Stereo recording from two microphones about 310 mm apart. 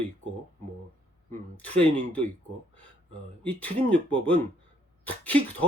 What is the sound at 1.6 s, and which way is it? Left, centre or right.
Speech, centre.